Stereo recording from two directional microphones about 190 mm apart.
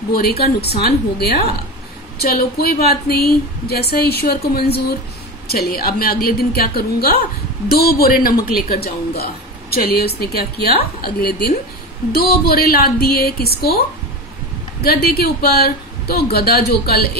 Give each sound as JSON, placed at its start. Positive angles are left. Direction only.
{"t": 0.1, "sound": "a woman's voice", "side_deg": 55}